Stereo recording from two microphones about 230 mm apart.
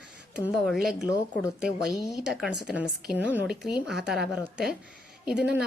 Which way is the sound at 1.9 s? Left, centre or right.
Centre.